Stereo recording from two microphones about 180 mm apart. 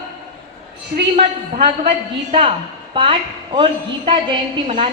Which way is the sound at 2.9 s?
25° right (ahead or behind).